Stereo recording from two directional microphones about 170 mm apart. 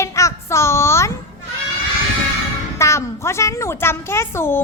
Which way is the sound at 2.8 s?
15° left (ahead or behind).